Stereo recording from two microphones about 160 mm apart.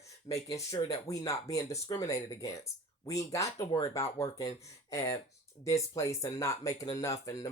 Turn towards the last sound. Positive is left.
turn(degrees=20)  # may be behind; listen again after turning